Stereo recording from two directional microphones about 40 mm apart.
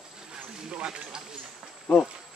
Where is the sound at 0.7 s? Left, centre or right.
Right.